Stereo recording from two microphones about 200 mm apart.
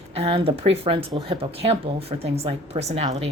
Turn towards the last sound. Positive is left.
turn(degrees=-30)  # may be behind; listen again after turning